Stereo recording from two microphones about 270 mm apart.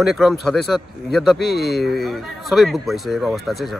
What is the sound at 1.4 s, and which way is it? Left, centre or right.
Speech, left.